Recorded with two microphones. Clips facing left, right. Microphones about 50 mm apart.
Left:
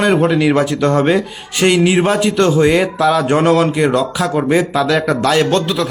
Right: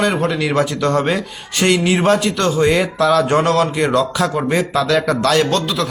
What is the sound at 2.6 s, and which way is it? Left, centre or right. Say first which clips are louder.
Speech: left 2 dB; centre.